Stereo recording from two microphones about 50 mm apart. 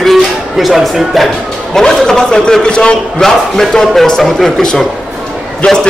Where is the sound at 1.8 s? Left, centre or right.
Centre.